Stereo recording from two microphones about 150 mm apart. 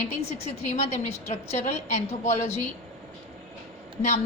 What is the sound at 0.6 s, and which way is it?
A woman's voice, 50° left (ahead or behind).